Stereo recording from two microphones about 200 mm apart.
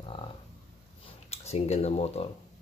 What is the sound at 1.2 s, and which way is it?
Speech, 30° left (ahead or behind).